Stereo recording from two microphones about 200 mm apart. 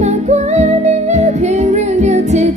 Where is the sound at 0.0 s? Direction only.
35° right (ahead or behind).